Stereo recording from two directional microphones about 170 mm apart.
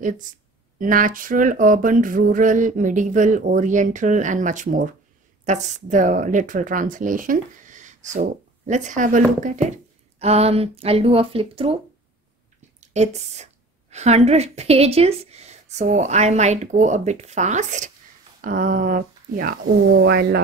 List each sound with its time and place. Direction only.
0.7 s speech: 55° right (ahead or behind); by 11.8 s 35° right (ahead or behind)
12.8 s a woman's voice: 40° right (ahead or behind)
20.1 s speech: 70° right (ahead or behind)